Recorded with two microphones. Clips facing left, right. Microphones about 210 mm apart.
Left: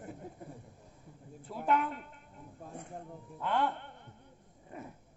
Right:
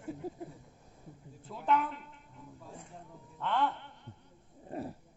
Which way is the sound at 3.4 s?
10° left (ahead or behind).